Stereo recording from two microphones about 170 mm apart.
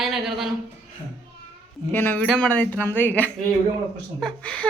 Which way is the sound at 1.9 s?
10° left (ahead or behind).